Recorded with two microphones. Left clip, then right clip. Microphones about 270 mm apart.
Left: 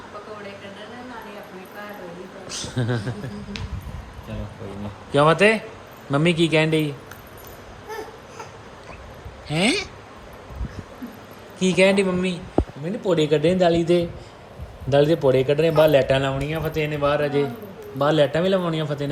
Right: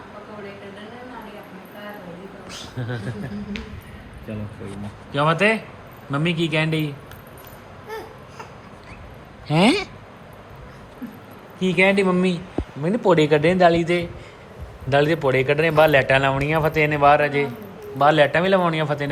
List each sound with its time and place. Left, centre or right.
2.7 s a man's voice: left
5.1 s speech: centre
9.5 s speech: centre
11.6 s speech: centre